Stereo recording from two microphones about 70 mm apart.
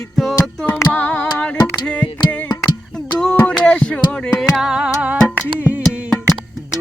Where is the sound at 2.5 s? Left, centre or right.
Left.